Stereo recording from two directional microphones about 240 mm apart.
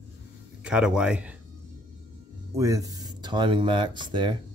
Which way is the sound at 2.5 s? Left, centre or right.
Centre.